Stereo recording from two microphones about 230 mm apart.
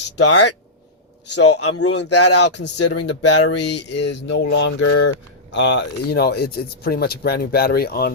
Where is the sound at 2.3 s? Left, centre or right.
Left.